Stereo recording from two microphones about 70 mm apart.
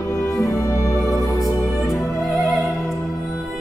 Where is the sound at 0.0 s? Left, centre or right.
Left.